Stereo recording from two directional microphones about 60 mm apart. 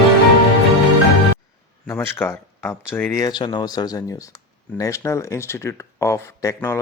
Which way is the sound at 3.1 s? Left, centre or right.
Left.